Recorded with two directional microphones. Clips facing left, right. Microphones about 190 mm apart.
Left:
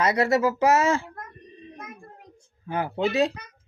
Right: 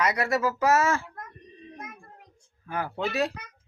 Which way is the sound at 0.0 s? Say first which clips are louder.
Left 4 dB; 25° left (ahead or behind).